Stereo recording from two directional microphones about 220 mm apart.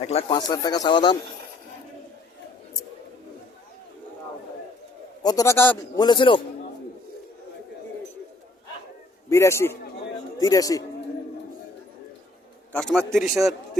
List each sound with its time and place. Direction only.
0.0 s speech: 25° left (ahead or behind)
5.2 s a man's voice: 15° left (ahead or behind)
9.3 s a man's voice: 10° left (ahead or behind)
12.7 s a man's voice: 5° left (ahead or behind)